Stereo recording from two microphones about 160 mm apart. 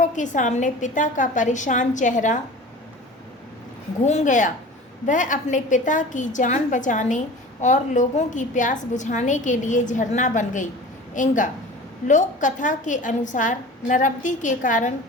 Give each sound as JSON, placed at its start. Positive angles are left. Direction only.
{"t": 0.0, "sound": "a woman's voice", "side_deg": 50}
{"t": 4.0, "sound": "a woman's voice", "side_deg": 50}